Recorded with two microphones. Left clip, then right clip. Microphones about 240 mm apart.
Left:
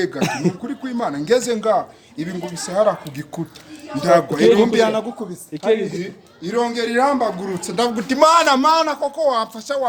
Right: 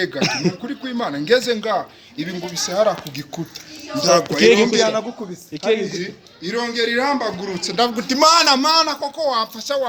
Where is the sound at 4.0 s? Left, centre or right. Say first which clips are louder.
Left 1 dB; left.